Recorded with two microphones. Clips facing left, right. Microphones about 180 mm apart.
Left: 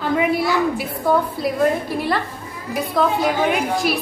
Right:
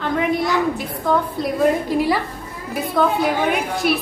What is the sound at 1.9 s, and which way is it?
Speech, 10° right (ahead or behind).